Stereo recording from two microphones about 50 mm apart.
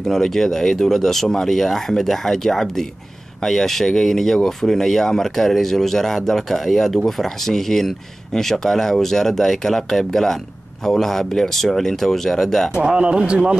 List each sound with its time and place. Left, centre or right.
0.1 s speech: centre
12.7 s speech: centre